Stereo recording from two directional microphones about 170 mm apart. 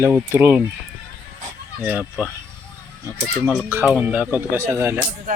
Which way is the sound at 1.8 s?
10° right (ahead or behind).